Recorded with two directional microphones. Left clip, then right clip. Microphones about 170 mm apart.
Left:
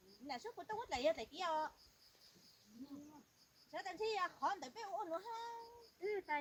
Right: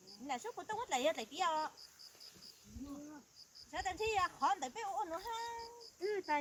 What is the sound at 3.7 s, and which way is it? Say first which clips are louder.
Speech: right 5 dB; 35° right (ahead or behind).